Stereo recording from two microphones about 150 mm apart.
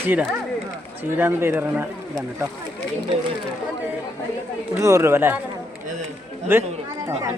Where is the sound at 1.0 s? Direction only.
15° right (ahead or behind).